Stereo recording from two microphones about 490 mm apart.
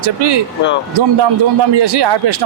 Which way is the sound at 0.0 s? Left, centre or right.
Right.